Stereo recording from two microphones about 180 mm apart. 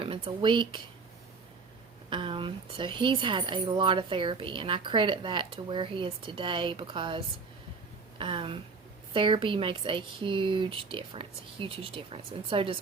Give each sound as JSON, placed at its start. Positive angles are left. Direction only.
{"t": 0.0, "sound": "speech", "side_deg": -30}
{"t": 2.0, "sound": "speech", "side_deg": -30}
{"t": 8.2, "sound": "speech", "side_deg": -30}